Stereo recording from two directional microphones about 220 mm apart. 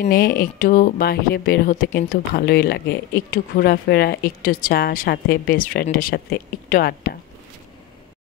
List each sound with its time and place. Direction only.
0.0 s speech: 45° left (ahead or behind)